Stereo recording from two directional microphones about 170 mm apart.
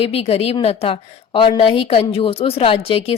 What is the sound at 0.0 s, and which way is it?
A woman's voice, 35° left (ahead or behind).